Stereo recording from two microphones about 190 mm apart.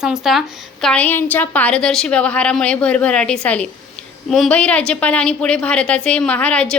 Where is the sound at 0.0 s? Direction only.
5° right (ahead or behind).